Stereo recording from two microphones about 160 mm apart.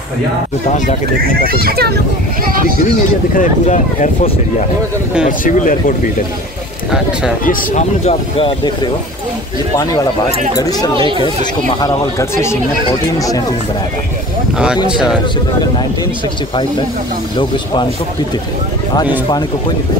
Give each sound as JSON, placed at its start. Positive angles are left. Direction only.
{"t": 1.3, "sound": "a child's voice", "side_deg": -70}
{"t": 3.3, "sound": "speech", "side_deg": 50}
{"t": 5.4, "sound": "speech", "side_deg": 55}
{"t": 7.4, "sound": "speech", "side_deg": 45}
{"t": 11.0, "sound": "speech", "side_deg": -30}
{"t": 11.8, "sound": "speech", "side_deg": 20}